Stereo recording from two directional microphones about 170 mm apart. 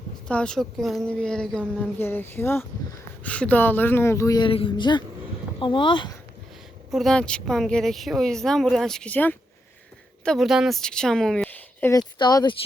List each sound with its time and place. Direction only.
0.3 s speech: 5° left (ahead or behind); by 6.1 s 30° left (ahead or behind)
6.9 s a woman's voice: 5° left (ahead or behind)
11.9 s speech: 25° left (ahead or behind)